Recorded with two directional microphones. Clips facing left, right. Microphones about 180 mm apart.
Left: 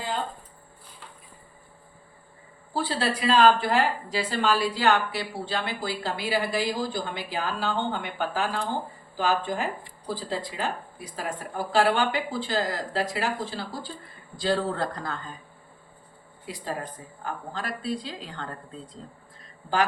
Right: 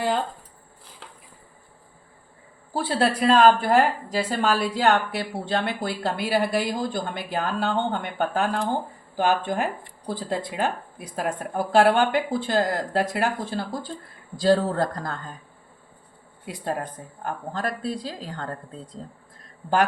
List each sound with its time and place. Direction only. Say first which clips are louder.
2.7 s speech: right 4 dB; 55° right (ahead or behind)
16.5 s speech: right 4 dB; 55° right (ahead or behind)